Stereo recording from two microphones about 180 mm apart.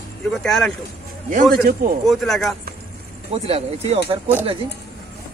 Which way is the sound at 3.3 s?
35° right (ahead or behind).